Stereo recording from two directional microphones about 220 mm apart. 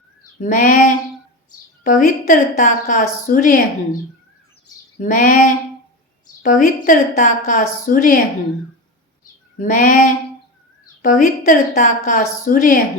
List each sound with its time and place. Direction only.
0.4 s a woman's voice: 35° left (ahead or behind)
4.9 s a woman's voice: 35° left (ahead or behind)
9.6 s a woman's voice: 35° left (ahead or behind)